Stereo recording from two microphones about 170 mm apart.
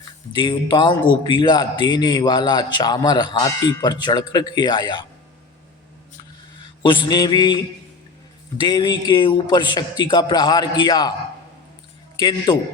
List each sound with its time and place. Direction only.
0.3 s speech: 30° left (ahead or behind)
6.8 s speech: 25° left (ahead or behind)
8.6 s speech: 25° left (ahead or behind)
12.2 s speech: 25° left (ahead or behind)